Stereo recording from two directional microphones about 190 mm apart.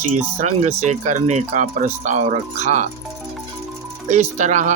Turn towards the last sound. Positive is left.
turn(degrees=-40)  # may be behind; listen again after turning